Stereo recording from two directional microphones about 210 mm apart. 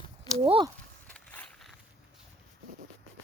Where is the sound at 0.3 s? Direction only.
25° right (ahead or behind).